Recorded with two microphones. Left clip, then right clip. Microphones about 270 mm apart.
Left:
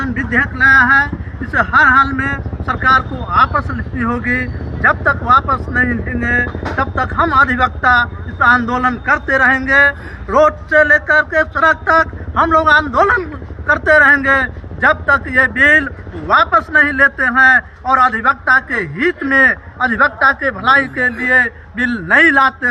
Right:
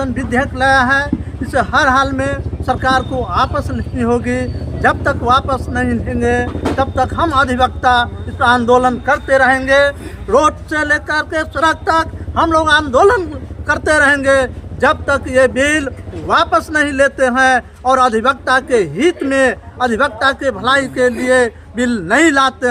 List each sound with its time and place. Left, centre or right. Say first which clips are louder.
0.1 s a man's voice: left 1 dB; centre